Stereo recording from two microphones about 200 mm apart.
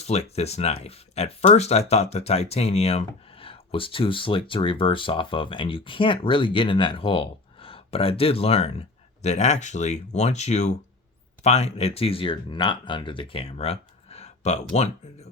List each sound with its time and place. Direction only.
0.0 s speech: 30° left (ahead or behind)